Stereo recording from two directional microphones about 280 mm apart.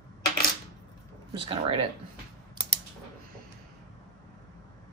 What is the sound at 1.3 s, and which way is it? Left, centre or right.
Speech, centre.